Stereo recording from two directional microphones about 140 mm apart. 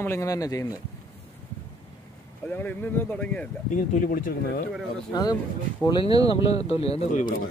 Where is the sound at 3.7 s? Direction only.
75° left (ahead or behind); by 4.6 s 90° left.